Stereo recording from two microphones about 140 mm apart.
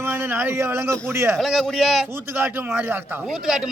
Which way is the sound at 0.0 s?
15° right (ahead or behind).